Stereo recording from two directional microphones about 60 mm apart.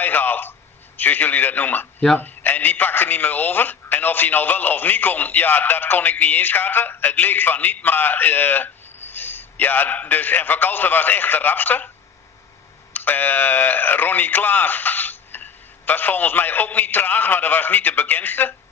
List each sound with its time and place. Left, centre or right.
0.0 s a man's voice: left
12.9 s speech: left